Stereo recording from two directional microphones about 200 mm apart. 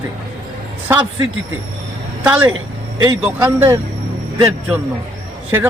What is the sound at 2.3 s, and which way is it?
Speech, 10° right (ahead or behind).